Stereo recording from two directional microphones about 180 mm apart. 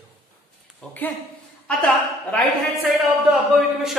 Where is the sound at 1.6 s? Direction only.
5° left (ahead or behind).